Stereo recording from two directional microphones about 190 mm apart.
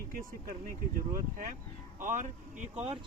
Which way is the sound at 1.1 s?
45° right (ahead or behind).